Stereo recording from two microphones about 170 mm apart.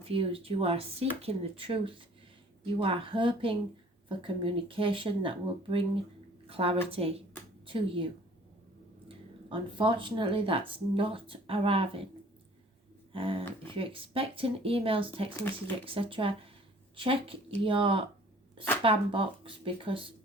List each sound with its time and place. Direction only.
0.0 s a woman's voice: 35° right (ahead or behind)
9.0 s speech: 30° right (ahead or behind)
13.1 s speech: 35° right (ahead or behind)
15.4 s speech: 10° left (ahead or behind)
15.8 s speech: 30° right (ahead or behind)